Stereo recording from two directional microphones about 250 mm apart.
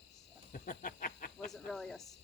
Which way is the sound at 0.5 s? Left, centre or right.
Left.